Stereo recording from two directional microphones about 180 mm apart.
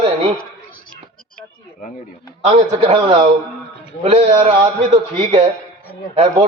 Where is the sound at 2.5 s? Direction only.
30° right (ahead or behind).